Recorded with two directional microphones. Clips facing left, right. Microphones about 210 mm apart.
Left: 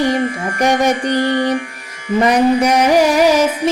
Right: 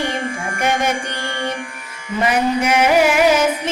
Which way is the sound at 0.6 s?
35° left (ahead or behind).